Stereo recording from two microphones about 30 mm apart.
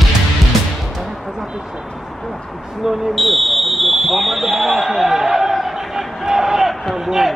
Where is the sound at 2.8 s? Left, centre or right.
Centre.